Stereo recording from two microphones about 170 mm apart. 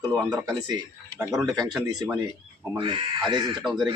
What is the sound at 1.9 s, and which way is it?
Speech, 20° right (ahead or behind).